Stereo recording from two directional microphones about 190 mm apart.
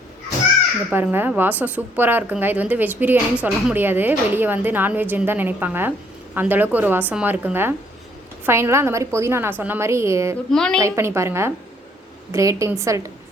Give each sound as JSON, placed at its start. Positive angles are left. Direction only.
{"t": 0.9, "sound": "a woman's voice", "side_deg": -10}
{"t": 10.5, "sound": "a woman's voice", "side_deg": 5}
{"t": 10.8, "sound": "a woman's voice", "side_deg": -15}